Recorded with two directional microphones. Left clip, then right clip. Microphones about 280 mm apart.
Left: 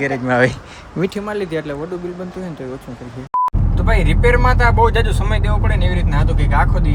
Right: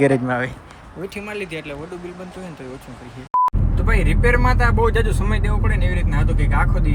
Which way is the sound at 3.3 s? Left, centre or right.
Centre.